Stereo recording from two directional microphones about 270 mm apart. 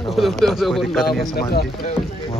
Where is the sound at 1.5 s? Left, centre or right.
Left.